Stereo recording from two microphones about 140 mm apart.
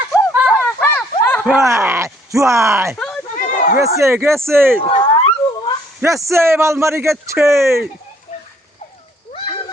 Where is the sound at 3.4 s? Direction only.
65° left (ahead or behind).